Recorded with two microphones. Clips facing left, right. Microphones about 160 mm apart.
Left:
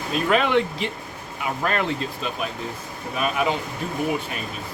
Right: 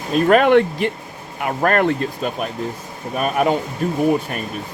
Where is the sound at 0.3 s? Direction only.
55° right (ahead or behind).